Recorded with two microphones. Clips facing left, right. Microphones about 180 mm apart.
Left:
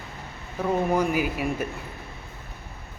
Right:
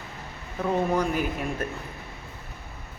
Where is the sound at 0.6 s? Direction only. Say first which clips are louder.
Left 1 dB; 10° left (ahead or behind).